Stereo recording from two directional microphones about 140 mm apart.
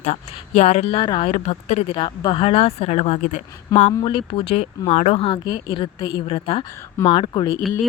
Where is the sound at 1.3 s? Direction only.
50° left (ahead or behind).